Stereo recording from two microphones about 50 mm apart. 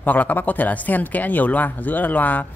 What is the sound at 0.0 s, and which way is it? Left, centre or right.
Speech, left.